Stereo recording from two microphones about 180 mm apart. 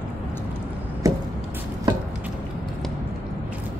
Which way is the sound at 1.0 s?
20° right (ahead or behind).